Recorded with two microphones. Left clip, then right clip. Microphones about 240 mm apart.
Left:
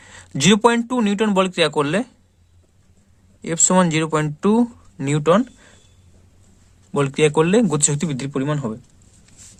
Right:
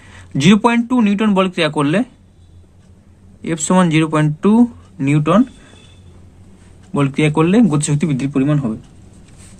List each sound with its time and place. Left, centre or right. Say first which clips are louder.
0.0 s speech: right 3 dB; left
3.4 s speech: right 1 dB; left
6.9 s speech: even; left